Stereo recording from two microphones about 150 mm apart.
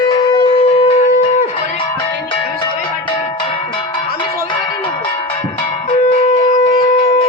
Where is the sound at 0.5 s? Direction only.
40° left (ahead or behind).